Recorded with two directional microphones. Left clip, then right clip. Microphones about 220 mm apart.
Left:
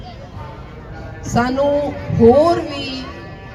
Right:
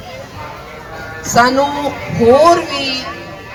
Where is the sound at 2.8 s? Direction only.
45° left (ahead or behind).